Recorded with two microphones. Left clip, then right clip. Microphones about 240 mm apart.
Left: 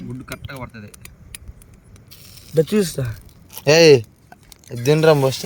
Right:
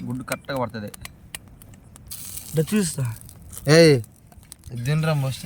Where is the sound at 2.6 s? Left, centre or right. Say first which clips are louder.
Left 7 dB; centre.